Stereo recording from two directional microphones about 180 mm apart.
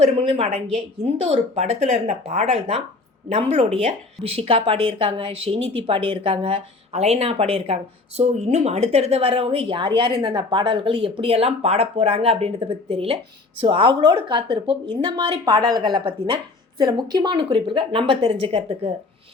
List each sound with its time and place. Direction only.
0.0 s a woman's voice: 35° right (ahead or behind)